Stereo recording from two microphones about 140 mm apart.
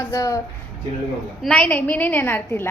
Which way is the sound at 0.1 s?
25° left (ahead or behind).